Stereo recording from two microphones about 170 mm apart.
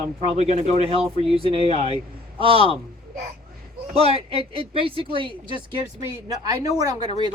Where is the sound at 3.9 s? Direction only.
35° right (ahead or behind); by 6.9 s 20° right (ahead or behind).